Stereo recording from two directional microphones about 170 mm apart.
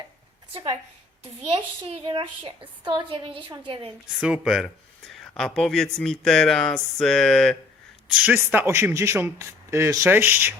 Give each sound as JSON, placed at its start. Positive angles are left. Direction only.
{"t": 0.5, "sound": "a woman's voice", "side_deg": -30}
{"t": 4.2, "sound": "speech", "side_deg": -5}